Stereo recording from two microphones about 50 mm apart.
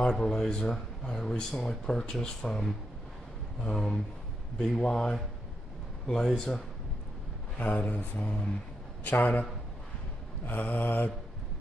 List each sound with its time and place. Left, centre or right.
0.2 s speech: centre
3.7 s speech: centre
7.5 s speech: left
9.0 s speech: left